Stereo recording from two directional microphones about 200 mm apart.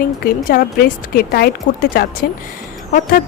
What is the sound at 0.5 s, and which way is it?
A woman's voice, 50° left (ahead or behind).